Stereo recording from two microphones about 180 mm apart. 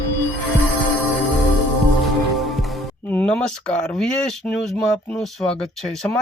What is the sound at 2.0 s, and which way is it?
Music, centre (ahead or behind).